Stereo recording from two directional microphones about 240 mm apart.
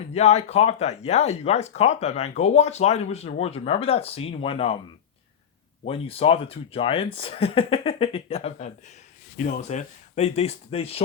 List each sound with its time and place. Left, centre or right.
0.1 s speech: left
5.8 s speech: left